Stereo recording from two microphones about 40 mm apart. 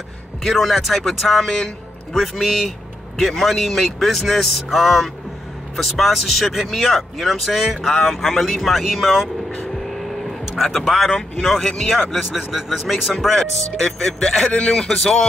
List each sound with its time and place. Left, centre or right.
0.4 s speech: centre
1.4 s a man's voice: centre
2.1 s speech: centre
9.8 s vehicle: centre
10.6 s a man's voice: centre
11.9 s a man's voice: centre
14.5 s a man's voice: left